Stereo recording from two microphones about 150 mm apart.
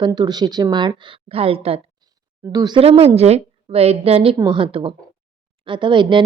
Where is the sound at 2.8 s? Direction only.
40° right (ahead or behind).